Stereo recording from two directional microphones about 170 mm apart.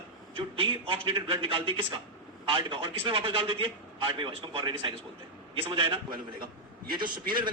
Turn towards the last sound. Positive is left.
turn(degrees=-25)  # may be behind; listen again after turning